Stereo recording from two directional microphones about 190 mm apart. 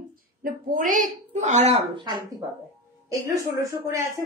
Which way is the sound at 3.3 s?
15° right (ahead or behind).